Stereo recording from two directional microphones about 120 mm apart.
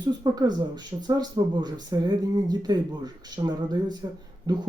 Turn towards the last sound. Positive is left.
turn(degrees=-35)  # may be behind; listen again after turning